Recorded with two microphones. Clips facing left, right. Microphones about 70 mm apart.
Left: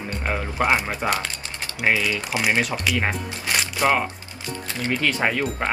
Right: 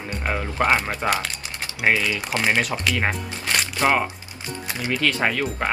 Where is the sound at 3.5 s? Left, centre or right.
Centre.